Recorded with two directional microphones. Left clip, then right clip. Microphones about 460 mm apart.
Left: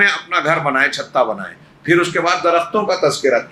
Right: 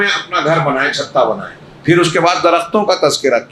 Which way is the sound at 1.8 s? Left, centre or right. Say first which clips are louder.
Right 4 dB; centre.